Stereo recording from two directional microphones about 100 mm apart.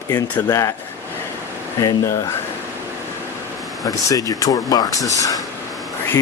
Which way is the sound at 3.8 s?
40° left (ahead or behind).